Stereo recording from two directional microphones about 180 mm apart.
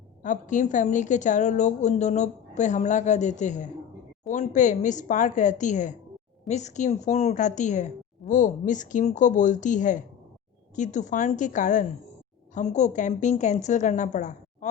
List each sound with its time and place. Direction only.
0.2 s a woman's voice: 45° left (ahead or behind)